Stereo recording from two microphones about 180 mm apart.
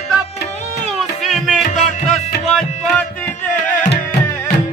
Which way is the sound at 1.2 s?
Centre (ahead or behind).